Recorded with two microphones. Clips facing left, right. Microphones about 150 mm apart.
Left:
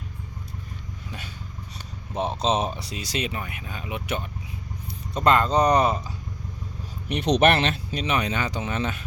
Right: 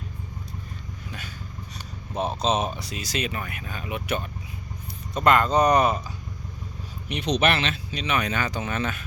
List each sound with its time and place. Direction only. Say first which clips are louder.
2.4 s speech: left 1 dB; 30° left (ahead or behind)
7.1 s speech: left 4 dB; 50° left (ahead or behind)
8.1 s speech: even; 25° left (ahead or behind)